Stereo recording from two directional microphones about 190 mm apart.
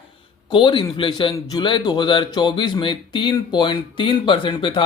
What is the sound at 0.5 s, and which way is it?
Speech, 25° left (ahead or behind).